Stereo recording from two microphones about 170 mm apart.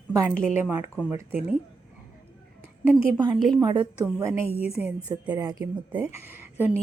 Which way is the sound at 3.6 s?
25° right (ahead or behind).